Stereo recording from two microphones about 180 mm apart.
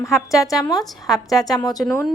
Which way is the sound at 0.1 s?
Centre (ahead or behind).